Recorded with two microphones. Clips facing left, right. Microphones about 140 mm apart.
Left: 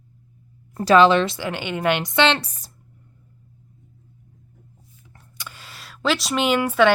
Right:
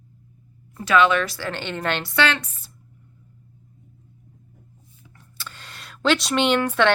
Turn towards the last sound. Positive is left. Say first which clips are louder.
# left 1 dB
turn(degrees=5)  # may be behind; listen again after turning